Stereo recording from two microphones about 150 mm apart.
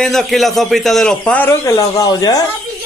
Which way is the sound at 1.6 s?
20° left (ahead or behind).